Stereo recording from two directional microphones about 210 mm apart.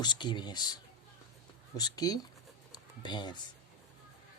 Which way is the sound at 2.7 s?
20° left (ahead or behind).